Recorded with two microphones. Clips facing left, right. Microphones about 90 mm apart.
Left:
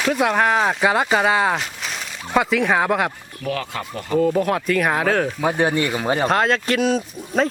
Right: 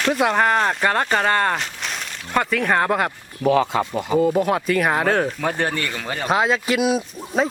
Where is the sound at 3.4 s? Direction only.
20° right (ahead or behind); by 5.4 s centre (ahead or behind).